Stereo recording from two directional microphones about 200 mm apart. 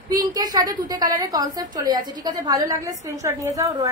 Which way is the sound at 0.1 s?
20° right (ahead or behind).